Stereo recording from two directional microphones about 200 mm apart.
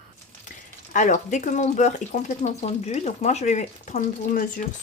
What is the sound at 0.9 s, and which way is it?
Speech, 40° left (ahead or behind).